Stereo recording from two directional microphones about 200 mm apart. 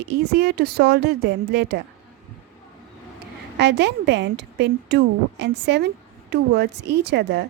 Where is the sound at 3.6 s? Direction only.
60° right (ahead or behind).